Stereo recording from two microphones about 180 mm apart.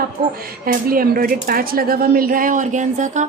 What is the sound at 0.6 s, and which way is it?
A woman's voice, 55° right (ahead or behind).